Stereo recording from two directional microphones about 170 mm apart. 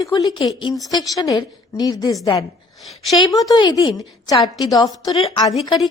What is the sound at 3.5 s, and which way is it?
Speech, 25° left (ahead or behind).